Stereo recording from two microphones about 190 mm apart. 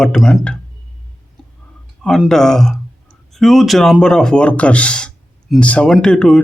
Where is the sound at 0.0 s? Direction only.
5° left (ahead or behind).